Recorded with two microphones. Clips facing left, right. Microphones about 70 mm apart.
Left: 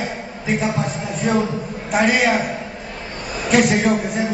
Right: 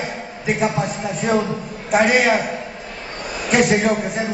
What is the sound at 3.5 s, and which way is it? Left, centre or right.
Speech, centre.